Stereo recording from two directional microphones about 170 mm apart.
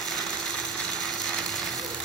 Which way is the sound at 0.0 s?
Centre (ahead or behind).